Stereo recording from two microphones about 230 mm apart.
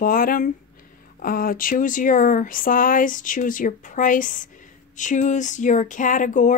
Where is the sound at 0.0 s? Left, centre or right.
Left.